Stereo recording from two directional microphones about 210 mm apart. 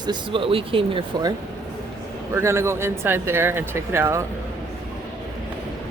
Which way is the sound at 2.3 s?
15° right (ahead or behind).